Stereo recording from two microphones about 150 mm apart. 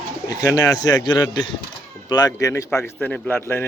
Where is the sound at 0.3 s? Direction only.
25° left (ahead or behind).